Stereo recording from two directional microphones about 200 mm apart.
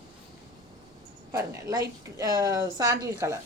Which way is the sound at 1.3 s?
15° right (ahead or behind).